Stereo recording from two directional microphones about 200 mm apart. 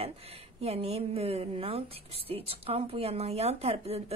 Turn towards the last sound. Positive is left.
turn(degrees=-30)  # may be behind; listen again after turning